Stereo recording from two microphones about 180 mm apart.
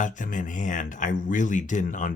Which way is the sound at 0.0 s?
45° left (ahead or behind).